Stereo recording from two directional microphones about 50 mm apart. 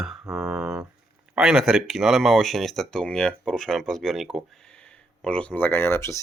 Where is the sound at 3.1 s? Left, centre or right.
Centre.